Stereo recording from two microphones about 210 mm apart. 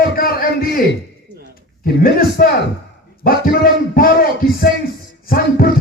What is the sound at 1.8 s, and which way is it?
A man's voice, 45° left (ahead or behind).